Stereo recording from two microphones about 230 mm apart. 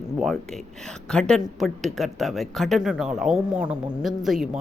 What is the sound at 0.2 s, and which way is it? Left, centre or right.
Speech, centre.